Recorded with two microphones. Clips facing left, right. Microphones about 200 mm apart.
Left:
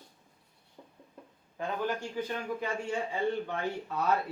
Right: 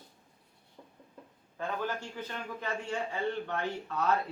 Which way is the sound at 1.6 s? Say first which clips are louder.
Left 2 dB; 15° left (ahead or behind).